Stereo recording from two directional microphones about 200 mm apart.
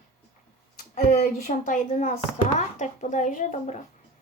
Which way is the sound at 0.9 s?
35° left (ahead or behind).